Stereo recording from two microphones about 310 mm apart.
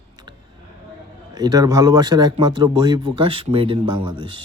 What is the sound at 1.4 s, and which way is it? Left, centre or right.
A man's voice, centre.